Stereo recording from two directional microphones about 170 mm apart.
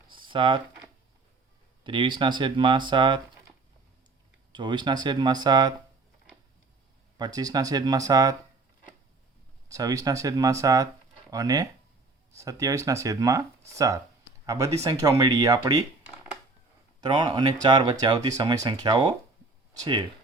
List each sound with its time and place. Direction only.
0.1 s a sound: 30° right (ahead or behind)
1.8 s speech: 30° right (ahead or behind)
4.5 s speech: 25° right (ahead or behind)
7.2 s speech: 20° right (ahead or behind)
9.6 s speech: 20° right (ahead or behind)